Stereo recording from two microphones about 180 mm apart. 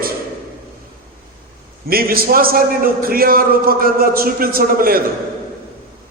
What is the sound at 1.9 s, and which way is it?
A man's voice, 55° right (ahead or behind).